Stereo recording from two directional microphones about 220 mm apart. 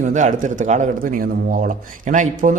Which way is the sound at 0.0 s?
35° right (ahead or behind).